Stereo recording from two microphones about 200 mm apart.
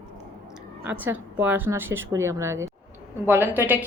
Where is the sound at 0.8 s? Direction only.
10° right (ahead or behind).